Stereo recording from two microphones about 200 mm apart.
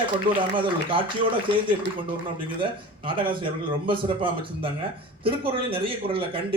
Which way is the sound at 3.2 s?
25° right (ahead or behind).